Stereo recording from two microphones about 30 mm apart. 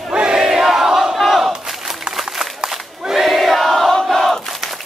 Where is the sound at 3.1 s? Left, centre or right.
Centre.